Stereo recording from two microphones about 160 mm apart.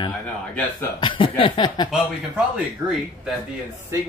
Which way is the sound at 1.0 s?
30° left (ahead or behind).